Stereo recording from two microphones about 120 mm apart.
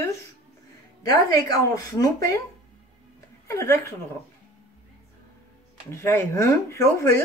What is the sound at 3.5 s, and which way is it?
Speech, 25° left (ahead or behind).